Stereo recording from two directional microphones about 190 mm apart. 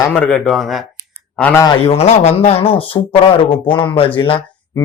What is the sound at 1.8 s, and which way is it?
A man's voice, 35° left (ahead or behind).